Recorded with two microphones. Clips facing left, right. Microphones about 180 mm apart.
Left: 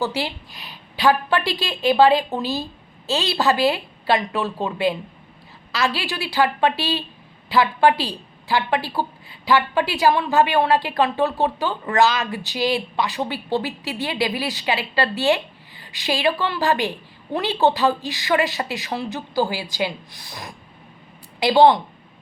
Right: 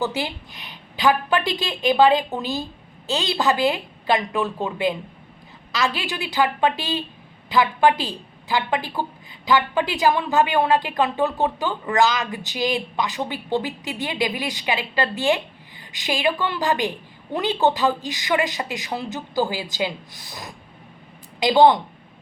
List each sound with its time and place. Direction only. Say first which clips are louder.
0.1 s a woman's voice: left 1 dB; 20° right (ahead or behind)
5.7 s a woman's voice: left 1 dB; 20° right (ahead or behind)